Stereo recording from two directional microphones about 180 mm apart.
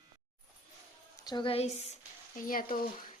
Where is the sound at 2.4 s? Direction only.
50° left (ahead or behind).